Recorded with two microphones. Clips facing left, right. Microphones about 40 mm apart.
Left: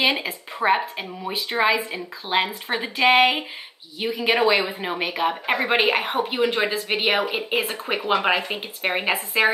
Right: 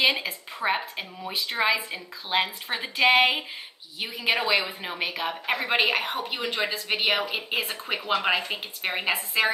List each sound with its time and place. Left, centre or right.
0.0 s a woman's voice: centre
8.1 s a woman's voice: centre